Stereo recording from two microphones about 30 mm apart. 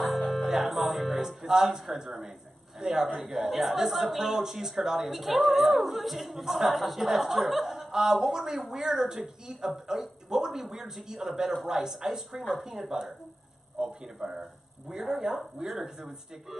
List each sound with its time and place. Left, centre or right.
0.0 s music: centre
1.4 s a man's voice: centre
5.1 s speech: centre
7.9 s speech: centre
13.7 s a man's voice: right